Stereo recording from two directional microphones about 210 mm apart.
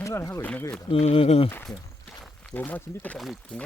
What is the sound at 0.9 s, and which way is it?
Speech, 30° left (ahead or behind).